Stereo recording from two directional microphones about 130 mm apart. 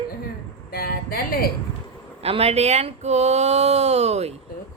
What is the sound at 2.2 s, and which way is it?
Speech, 50° right (ahead or behind).